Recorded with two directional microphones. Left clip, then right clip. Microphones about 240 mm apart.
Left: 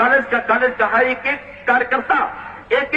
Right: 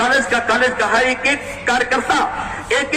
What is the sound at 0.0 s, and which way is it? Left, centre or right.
A man's voice, right.